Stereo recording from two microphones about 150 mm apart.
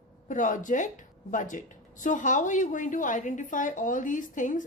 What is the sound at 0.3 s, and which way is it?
A woman's voice, 60° left (ahead or behind).